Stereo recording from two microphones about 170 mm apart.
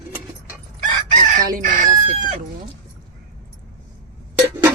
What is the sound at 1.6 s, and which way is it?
Chicken, 55° right (ahead or behind).